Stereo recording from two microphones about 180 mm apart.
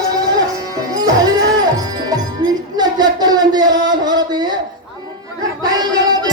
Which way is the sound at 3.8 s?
20° right (ahead or behind).